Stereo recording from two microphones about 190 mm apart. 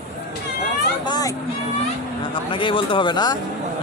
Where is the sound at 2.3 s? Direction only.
25° left (ahead or behind).